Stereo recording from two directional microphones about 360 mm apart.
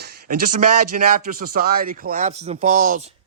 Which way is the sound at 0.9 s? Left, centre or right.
Right.